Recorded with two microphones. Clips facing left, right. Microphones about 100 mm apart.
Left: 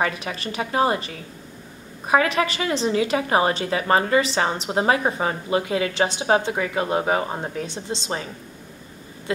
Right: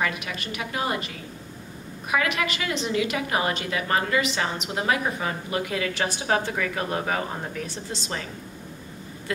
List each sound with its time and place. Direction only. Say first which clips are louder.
0.0 s a woman's voice: left 4 dB; 35° left (ahead or behind)